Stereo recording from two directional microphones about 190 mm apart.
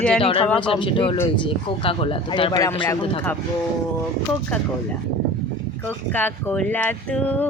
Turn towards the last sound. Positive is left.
turn(degrees=10)  # may be behind; listen again after turning